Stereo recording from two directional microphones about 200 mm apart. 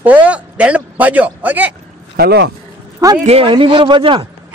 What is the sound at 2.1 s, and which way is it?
Speech, 55° right (ahead or behind).